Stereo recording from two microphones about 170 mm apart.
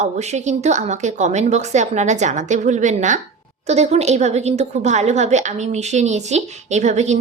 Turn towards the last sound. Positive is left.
turn(degrees=-45)  # may be behind; listen again after turning